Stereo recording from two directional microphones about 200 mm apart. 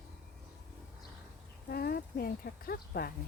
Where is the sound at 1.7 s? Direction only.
50° left (ahead or behind).